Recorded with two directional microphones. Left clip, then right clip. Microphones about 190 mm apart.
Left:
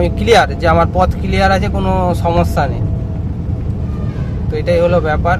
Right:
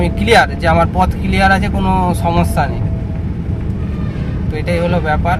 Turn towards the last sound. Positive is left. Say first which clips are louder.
# left 3 dB
turn(degrees=0)  # may be behind; listen again after turning